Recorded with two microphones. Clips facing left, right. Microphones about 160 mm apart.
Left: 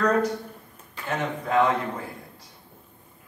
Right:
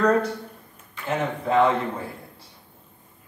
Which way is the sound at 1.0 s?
25° right (ahead or behind).